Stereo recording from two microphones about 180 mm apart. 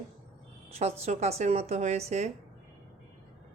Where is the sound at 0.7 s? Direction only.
35° right (ahead or behind).